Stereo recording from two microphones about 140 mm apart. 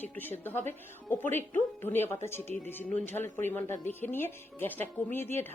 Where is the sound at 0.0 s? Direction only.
15° left (ahead or behind).